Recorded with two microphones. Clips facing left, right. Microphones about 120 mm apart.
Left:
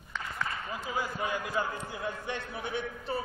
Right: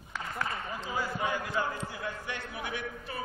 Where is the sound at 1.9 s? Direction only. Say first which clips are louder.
Left 2 dB; 25° left (ahead or behind).